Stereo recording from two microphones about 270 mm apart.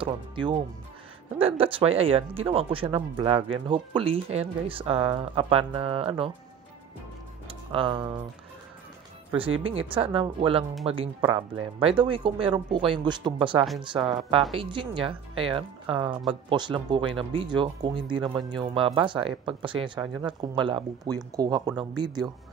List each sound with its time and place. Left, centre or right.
0.0 s speech: centre
7.4 s speech: centre
9.6 s speech: centre